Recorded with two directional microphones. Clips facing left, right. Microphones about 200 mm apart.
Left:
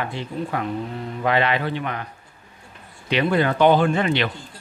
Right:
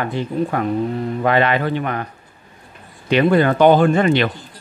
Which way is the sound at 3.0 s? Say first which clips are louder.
Right 6 dB; 50° right (ahead or behind).